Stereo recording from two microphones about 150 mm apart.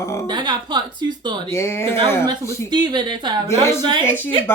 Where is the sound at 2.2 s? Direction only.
30° right (ahead or behind).